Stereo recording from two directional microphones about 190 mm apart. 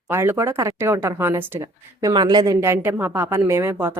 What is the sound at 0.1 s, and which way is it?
Speech, 10° right (ahead or behind).